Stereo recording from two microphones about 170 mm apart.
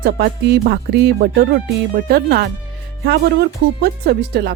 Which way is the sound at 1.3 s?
60° right (ahead or behind).